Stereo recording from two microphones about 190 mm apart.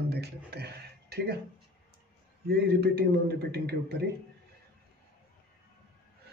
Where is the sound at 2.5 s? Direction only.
60° right (ahead or behind).